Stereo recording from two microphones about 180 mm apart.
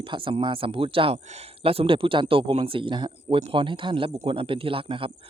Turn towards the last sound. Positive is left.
turn(degrees=-30)  # may be behind; listen again after turning